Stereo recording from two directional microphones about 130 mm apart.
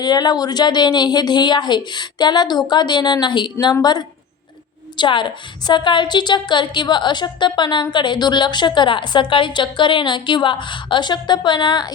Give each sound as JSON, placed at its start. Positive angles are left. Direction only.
{"t": 0.0, "sound": "a woman's voice", "side_deg": 30}
{"t": 4.9, "sound": "a woman's voice", "side_deg": 35}